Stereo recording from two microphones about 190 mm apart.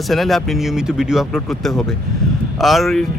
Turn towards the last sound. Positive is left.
turn(degrees=0)  # may be behind; listen again after turning